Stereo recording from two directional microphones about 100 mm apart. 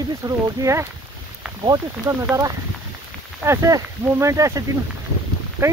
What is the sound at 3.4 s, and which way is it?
Speech, 30° right (ahead or behind).